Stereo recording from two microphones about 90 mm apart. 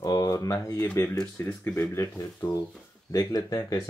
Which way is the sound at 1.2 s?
15° left (ahead or behind).